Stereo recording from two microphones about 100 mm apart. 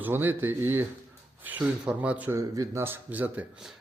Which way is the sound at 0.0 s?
20° right (ahead or behind).